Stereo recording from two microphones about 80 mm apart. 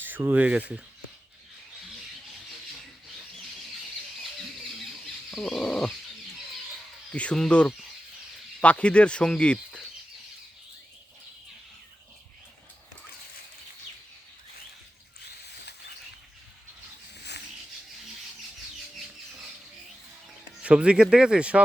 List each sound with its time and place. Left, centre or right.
0.0 s speech: right
5.3 s a sound: centre
7.1 s speech: centre
20.6 s speech: centre